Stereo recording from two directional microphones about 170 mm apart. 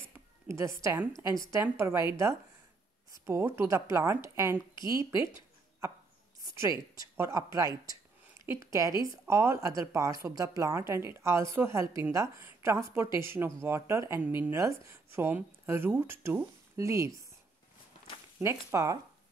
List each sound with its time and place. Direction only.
0.5 s a woman's voice: 15° right (ahead or behind)
5.1 s a sound: 15° right (ahead or behind)
7.0 s a woman's voice: 15° right (ahead or behind)
18.4 s a woman's voice: 15° right (ahead or behind)